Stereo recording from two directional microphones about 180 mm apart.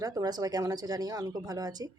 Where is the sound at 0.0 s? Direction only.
20° right (ahead or behind).